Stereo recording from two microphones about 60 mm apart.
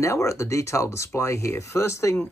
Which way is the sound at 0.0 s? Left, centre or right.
Left.